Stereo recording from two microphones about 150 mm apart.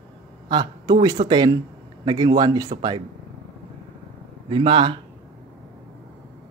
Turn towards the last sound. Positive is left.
turn(degrees=-35)  # may be behind; listen again after turning